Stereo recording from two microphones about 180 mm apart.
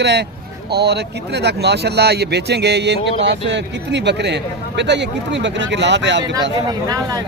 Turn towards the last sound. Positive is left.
turn(degrees=-20)  # may be behind; listen again after turning